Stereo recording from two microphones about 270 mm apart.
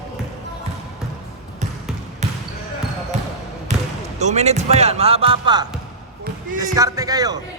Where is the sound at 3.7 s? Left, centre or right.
Right.